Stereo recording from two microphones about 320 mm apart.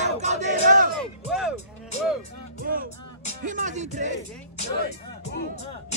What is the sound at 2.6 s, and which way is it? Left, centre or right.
Music, right.